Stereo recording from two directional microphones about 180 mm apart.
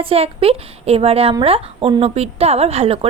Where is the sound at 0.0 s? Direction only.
30° right (ahead or behind).